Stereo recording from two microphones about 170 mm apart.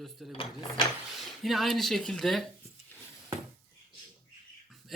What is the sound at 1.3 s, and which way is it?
Speech, centre (ahead or behind).